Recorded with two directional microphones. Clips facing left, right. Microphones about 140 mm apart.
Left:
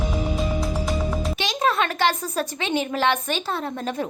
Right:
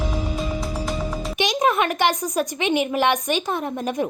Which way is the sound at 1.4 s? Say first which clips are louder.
Right 4 dB; 15° right (ahead or behind).